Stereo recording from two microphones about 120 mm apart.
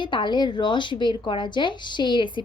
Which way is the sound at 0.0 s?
40° left (ahead or behind).